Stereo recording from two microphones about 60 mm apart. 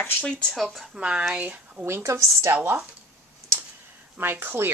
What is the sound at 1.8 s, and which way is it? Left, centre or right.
Speech, right.